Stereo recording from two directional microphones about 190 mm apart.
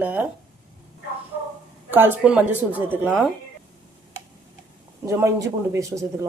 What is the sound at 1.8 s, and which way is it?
Speech, 10° right (ahead or behind).